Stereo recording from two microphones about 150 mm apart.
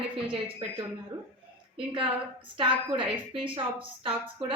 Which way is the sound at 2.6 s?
35° right (ahead or behind).